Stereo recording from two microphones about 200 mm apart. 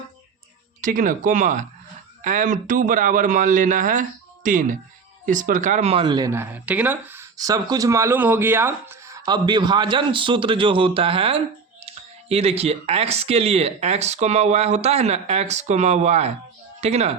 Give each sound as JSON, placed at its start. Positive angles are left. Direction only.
{"t": 0.8, "sound": "speech", "side_deg": -40}